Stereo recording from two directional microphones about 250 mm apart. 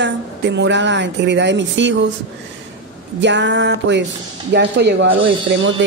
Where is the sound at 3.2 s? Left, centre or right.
Right.